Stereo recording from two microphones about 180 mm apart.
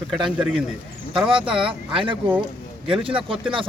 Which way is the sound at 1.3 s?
30° right (ahead or behind).